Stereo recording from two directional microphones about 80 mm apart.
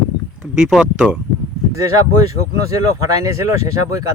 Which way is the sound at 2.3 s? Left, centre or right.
Right.